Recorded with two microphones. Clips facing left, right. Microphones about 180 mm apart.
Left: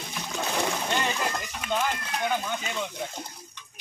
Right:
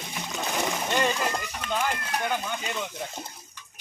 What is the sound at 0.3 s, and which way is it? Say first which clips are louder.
Splash: left 1 dB; centre (ahead or behind).